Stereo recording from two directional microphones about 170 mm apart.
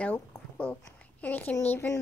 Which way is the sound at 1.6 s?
10° left (ahead or behind).